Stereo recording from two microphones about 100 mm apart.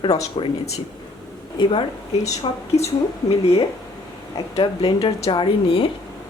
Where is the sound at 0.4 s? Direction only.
55° left (ahead or behind).